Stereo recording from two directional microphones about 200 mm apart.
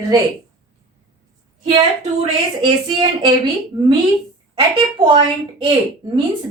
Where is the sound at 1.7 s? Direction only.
25° right (ahead or behind).